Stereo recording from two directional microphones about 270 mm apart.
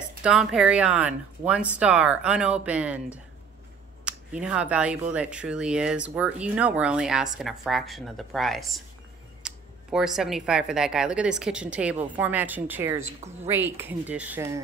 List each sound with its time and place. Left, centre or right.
0.2 s speech: centre
4.0 s speech: centre